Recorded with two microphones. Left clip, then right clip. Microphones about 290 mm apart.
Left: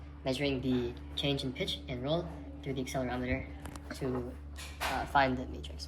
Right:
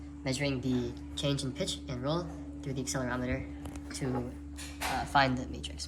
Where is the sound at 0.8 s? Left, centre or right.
Centre.